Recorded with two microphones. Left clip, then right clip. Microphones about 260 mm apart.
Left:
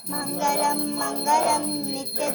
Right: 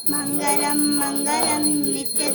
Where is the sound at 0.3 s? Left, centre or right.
Centre.